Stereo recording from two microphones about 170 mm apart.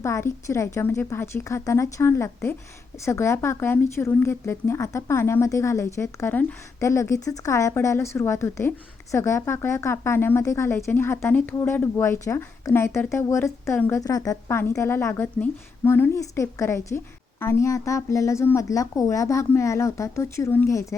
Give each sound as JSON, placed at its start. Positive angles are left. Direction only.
{"t": 0.0, "sound": "speech", "side_deg": 15}